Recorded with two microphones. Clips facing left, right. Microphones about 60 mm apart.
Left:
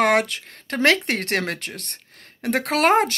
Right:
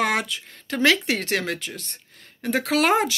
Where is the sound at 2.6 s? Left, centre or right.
Left.